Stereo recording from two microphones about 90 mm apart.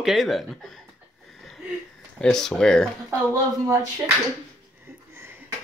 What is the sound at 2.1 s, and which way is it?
Speech, 10° left (ahead or behind).